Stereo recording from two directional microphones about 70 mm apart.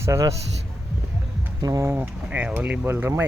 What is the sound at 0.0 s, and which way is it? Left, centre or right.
Speech, right.